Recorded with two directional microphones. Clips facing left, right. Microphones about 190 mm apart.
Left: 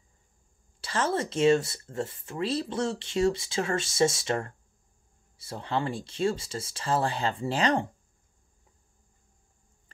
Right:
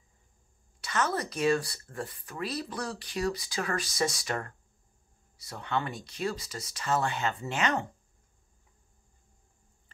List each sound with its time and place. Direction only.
0.7 s speech: 30° left (ahead or behind)